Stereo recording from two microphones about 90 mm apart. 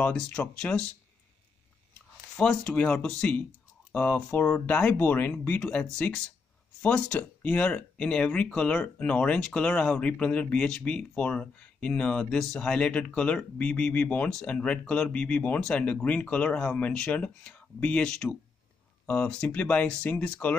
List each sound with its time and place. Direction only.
0.0 s speech: 15° left (ahead or behind)
2.3 s speech: 10° left (ahead or behind)